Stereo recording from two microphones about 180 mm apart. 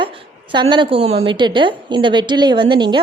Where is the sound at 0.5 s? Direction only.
25° right (ahead or behind).